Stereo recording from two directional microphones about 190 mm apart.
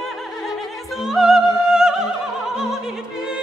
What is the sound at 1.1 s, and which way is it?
Music, centre (ahead or behind).